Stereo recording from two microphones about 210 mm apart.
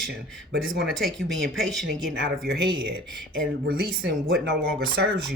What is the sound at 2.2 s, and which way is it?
Speech, 55° right (ahead or behind).